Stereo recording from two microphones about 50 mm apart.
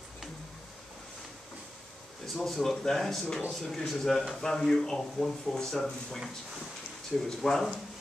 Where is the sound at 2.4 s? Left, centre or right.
Centre.